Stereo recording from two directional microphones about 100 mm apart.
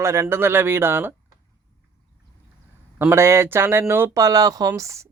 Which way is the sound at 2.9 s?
25° right (ahead or behind).